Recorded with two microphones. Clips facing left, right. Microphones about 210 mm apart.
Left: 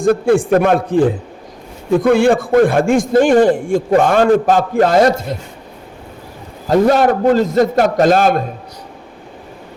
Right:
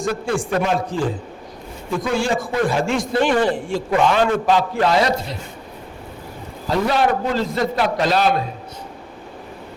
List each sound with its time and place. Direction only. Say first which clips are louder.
0.0 s a man's voice: left 10 dB; 55° left (ahead or behind)
6.7 s a man's voice: left 7 dB; 45° left (ahead or behind)